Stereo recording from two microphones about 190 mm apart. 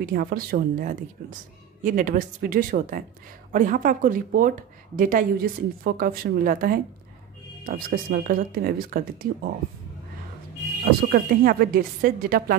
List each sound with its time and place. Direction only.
0.1 s speech: 50° right (ahead or behind)
11.1 s speech: 50° right (ahead or behind)